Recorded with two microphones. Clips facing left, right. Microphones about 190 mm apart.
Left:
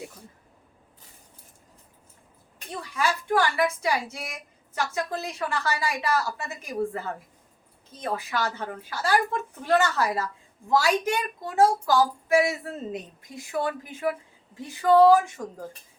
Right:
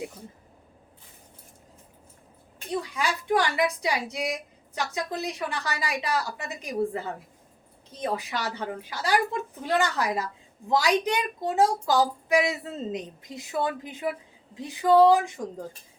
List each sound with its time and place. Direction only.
2.9 s a woman's voice: 15° right (ahead or behind)